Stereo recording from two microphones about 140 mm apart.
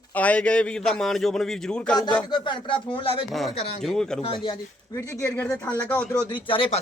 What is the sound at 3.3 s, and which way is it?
Speech, centre (ahead or behind).